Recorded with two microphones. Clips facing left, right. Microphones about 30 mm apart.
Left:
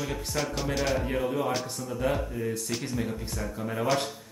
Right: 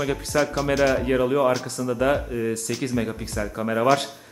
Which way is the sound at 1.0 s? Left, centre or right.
Right.